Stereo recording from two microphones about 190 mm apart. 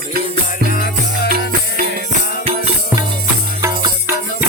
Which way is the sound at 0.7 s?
50° left (ahead or behind).